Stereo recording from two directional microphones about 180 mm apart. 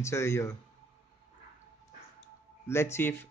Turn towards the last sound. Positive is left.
turn(degrees=15)  # may be behind; listen again after turning